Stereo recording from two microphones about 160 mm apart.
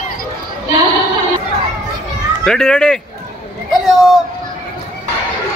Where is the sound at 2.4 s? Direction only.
5° left (ahead or behind).